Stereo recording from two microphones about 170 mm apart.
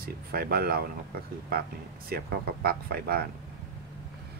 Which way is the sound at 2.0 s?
65° right (ahead or behind).